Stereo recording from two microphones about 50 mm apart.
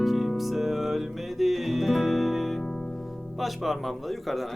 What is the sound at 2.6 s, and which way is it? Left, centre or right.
Music, centre.